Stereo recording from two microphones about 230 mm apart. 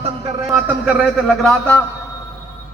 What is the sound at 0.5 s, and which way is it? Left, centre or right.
A man's voice, centre.